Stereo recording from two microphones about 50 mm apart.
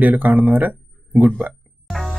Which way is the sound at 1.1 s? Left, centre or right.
Centre.